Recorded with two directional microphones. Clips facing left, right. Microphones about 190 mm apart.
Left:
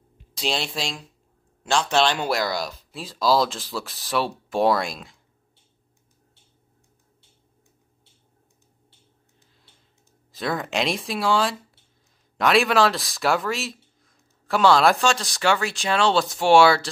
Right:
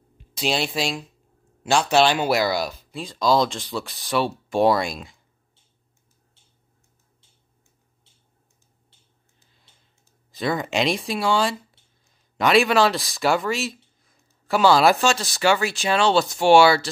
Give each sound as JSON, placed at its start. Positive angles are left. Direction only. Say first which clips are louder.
{"t": 0.4, "sound": "speech", "louder": "right 3 dB", "side_deg": -5}
{"t": 10.3, "sound": "speech", "louder": "right 2 dB", "side_deg": 0}